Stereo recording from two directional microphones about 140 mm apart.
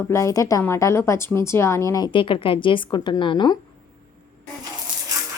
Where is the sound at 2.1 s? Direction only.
35° left (ahead or behind).